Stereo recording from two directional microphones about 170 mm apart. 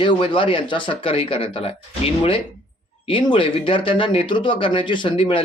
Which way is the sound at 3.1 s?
30° left (ahead or behind).